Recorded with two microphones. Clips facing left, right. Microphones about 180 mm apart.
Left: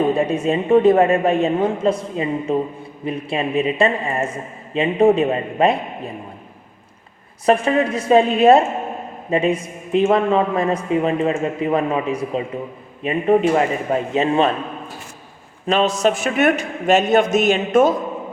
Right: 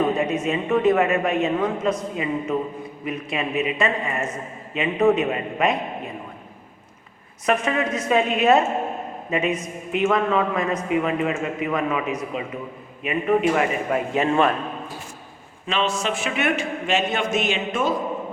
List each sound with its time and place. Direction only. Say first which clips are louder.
0.0 s a man's voice: left 4 dB; 30° left (ahead or behind)
7.4 s a man's voice: left 6 dB; 30° left (ahead or behind)
15.6 s a man's voice: left 7 dB; 40° left (ahead or behind)